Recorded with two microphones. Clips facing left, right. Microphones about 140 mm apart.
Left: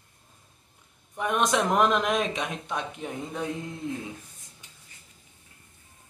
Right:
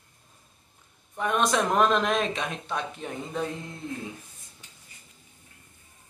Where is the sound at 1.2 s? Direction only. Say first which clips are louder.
Even; 15° left (ahead or behind).